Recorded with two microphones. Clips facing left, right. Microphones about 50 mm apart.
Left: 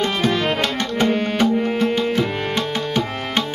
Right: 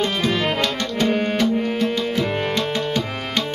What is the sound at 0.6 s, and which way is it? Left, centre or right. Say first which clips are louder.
Tabla: left 1 dB; left.